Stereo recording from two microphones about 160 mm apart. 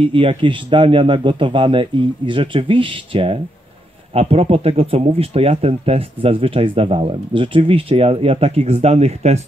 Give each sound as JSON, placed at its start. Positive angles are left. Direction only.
{"t": 0.0, "sound": "speech", "side_deg": -35}